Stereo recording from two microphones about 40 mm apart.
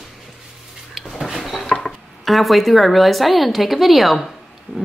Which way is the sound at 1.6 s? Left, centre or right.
Centre.